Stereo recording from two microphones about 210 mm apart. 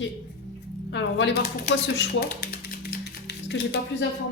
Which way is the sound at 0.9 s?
55° left (ahead or behind).